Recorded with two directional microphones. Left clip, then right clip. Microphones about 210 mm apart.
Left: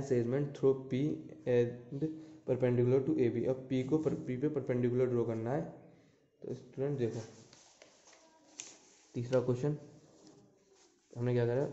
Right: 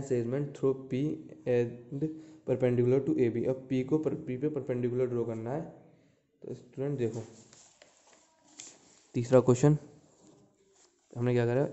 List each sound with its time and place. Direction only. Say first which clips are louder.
0.0 s a man's voice: right 1 dB; 15° right (ahead or behind)
9.1 s speech: right 8 dB; 45° right (ahead or behind)
11.1 s speech: right 4 dB; 35° right (ahead or behind)